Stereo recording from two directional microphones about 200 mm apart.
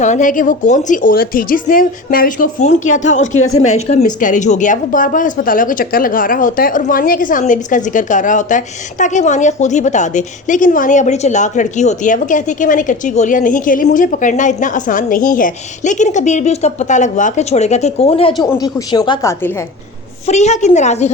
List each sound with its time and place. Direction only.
0.0 s a woman's voice: 40° left (ahead or behind); by 19.5 s 15° left (ahead or behind)
20.2 s a woman's voice: 35° left (ahead or behind)